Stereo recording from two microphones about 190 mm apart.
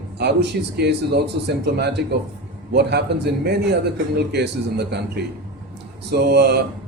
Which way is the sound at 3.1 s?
60° right (ahead or behind).